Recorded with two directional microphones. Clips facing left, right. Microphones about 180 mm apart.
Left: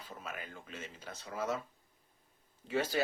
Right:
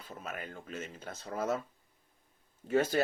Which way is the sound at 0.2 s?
40° right (ahead or behind).